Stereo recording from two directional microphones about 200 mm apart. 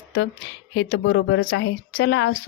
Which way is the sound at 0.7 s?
60° left (ahead or behind).